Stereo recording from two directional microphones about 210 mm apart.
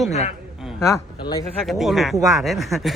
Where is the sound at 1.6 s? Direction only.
Centre (ahead or behind).